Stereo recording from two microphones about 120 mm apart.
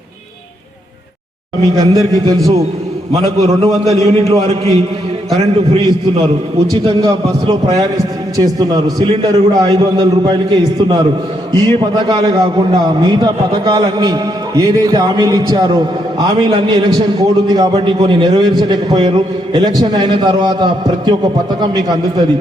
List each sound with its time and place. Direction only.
1.8 s a man's voice: 30° right (ahead or behind)
3.2 s a man's voice: 60° right (ahead or behind)
6.8 s a man's voice: 45° right (ahead or behind)
7.8 s a sound: 30° right (ahead or behind)
8.5 s a man's voice: 30° right (ahead or behind)